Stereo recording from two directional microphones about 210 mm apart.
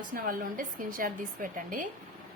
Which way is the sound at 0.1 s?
40° right (ahead or behind).